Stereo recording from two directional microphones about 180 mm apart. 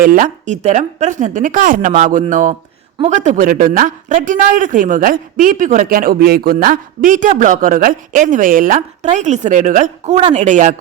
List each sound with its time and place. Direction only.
0.0 s speech: 50° right (ahead or behind)